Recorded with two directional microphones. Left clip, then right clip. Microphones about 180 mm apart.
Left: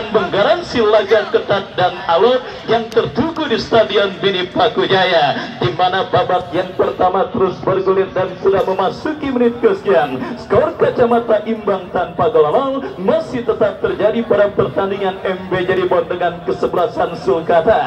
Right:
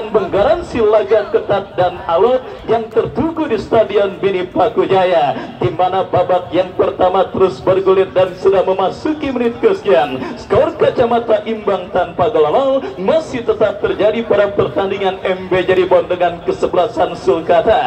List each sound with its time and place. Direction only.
0.4 s speech: 10° right (ahead or behind)
3.4 s speech: 15° right (ahead or behind)
8.6 s a man's voice: 10° right (ahead or behind)